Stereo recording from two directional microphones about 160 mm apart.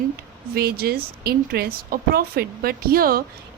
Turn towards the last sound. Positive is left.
turn(degrees=-65)  # may be behind; listen again after turning